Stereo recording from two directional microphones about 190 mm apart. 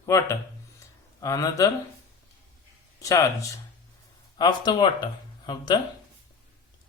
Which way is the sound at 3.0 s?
15° left (ahead or behind).